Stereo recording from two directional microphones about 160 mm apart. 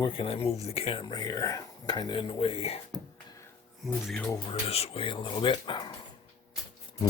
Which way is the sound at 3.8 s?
Centre (ahead or behind).